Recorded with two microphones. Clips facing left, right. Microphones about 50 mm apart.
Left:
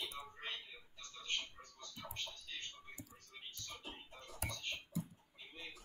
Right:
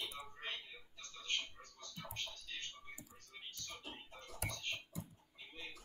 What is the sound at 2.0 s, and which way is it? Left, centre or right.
Music, centre.